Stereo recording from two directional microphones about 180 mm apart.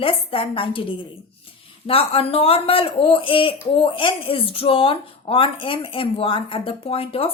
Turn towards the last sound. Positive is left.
turn(degrees=30)  # may be behind; listen again after turning